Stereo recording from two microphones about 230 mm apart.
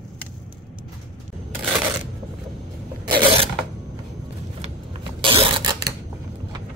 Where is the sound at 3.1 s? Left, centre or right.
Right.